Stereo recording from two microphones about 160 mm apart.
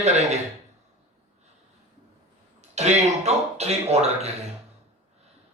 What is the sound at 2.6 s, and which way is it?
Speech, 45° right (ahead or behind).